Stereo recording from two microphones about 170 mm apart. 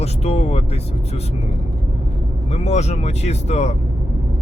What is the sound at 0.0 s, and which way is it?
Speech, 40° left (ahead or behind).